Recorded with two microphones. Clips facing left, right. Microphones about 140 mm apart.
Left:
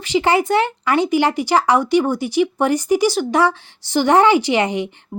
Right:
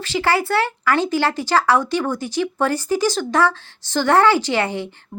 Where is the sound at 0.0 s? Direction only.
15° left (ahead or behind).